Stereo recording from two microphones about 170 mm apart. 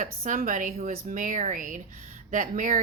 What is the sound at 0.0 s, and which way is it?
Speech, 50° right (ahead or behind).